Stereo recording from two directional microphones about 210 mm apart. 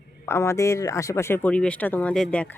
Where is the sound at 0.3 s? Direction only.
15° left (ahead or behind).